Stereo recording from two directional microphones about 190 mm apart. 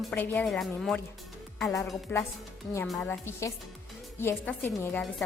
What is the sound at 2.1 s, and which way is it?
Speech, 10° left (ahead or behind).